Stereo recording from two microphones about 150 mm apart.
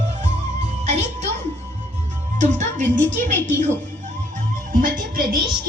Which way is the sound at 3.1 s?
55° right (ahead or behind).